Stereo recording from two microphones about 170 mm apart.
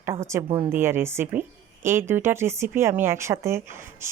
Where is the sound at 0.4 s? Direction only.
30° right (ahead or behind).